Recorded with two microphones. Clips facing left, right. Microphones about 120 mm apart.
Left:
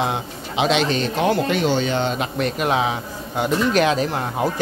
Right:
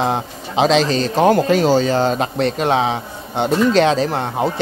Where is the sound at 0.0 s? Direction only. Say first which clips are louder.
Right 4 dB; 35° right (ahead or behind).